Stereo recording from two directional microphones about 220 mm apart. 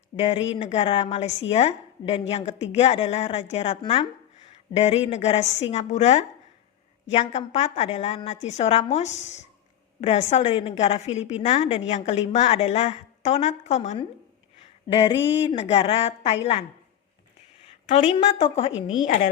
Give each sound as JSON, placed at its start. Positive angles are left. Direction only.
{"t": 0.1, "sound": "speech", "side_deg": 45}
{"t": 0.5, "sound": "a woman's voice", "side_deg": 25}
{"t": 17.8, "sound": "a woman's voice", "side_deg": 25}